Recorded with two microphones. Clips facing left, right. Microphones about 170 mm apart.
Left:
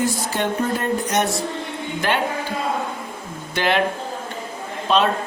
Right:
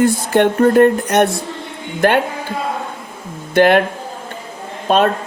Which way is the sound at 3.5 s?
50° right (ahead or behind).